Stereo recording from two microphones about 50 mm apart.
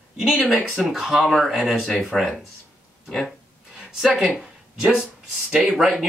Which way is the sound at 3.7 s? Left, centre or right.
Centre.